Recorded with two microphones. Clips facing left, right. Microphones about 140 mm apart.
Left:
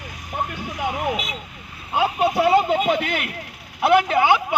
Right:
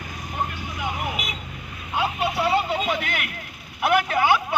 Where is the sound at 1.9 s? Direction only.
45° left (ahead or behind).